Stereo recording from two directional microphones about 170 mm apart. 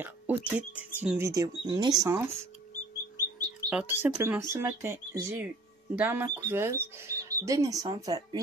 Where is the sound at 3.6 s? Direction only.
10° right (ahead or behind).